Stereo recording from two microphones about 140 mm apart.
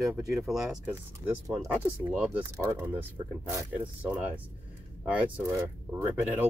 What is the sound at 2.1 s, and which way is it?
Speech, 10° right (ahead or behind).